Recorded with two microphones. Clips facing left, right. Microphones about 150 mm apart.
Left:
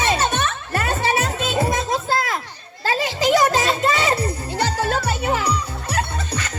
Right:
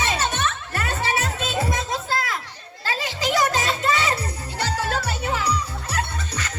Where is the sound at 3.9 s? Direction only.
20° left (ahead or behind).